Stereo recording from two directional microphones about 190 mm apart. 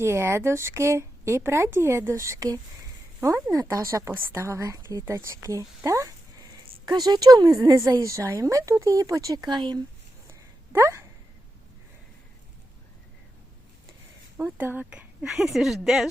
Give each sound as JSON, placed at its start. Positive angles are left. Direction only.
{"t": 0.0, "sound": "a woman's voice", "side_deg": -15}
{"t": 14.3, "sound": "speech", "side_deg": -10}